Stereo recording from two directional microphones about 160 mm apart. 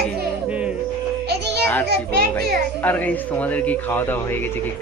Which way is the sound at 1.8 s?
90° right.